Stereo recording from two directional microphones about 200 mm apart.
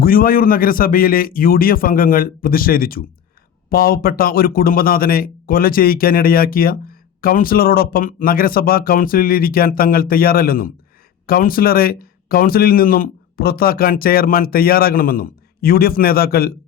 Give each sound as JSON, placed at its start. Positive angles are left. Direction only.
{"t": 0.0, "sound": "speech", "side_deg": 45}